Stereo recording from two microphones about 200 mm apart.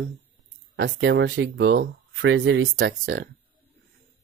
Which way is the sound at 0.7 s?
65° right (ahead or behind).